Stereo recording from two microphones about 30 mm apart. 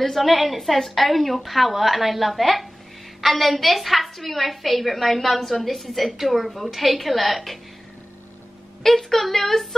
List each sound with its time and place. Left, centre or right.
0.0 s a woman's voice: centre
8.8 s a woman's voice: centre